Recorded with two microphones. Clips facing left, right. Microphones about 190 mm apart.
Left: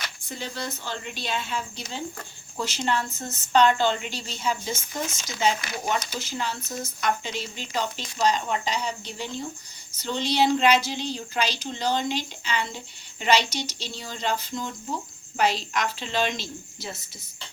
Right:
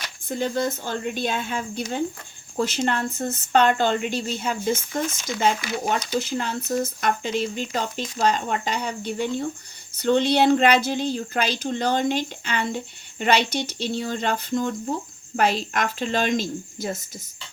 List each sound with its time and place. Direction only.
0.3 s a woman's voice: 50° right (ahead or behind)